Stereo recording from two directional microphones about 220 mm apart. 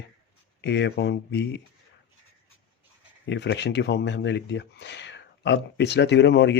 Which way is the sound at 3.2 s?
50° left (ahead or behind).